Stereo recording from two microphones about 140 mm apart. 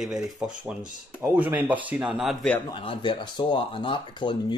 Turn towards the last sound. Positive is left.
turn(degrees=35)  # may be behind; listen again after turning